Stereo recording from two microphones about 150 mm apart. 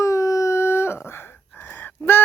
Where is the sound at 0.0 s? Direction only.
20° left (ahead or behind).